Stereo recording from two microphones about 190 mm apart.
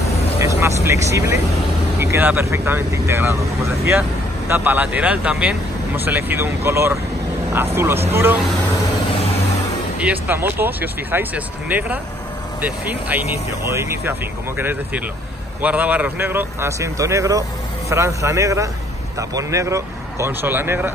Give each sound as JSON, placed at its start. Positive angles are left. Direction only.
{"t": 0.6, "sound": "speech", "side_deg": -15}
{"t": 9.9, "sound": "speech", "side_deg": -10}